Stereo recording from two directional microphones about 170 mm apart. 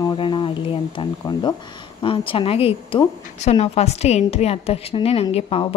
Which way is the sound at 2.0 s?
30° left (ahead or behind).